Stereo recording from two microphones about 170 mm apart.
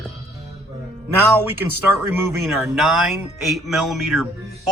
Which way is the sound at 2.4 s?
Centre (ahead or behind).